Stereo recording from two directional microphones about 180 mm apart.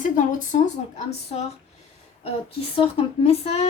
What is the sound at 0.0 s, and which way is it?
Speech, 45° left (ahead or behind).